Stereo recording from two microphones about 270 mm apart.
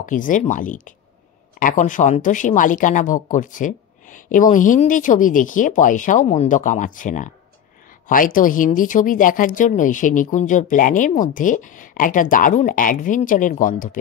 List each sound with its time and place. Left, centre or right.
0.0 s speech: left